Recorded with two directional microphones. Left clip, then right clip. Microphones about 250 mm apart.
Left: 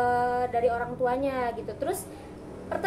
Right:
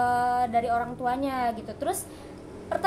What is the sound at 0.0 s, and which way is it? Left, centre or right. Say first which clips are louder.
A woman's voice: right 1 dB; centre.